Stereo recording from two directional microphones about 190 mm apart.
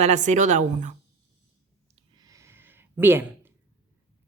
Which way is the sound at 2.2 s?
15° right (ahead or behind).